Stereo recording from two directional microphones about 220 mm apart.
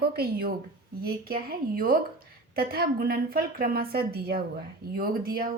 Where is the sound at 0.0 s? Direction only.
45° right (ahead or behind).